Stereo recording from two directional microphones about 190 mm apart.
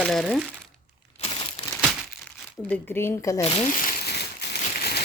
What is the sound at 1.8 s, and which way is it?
Crumpling, 5° right (ahead or behind).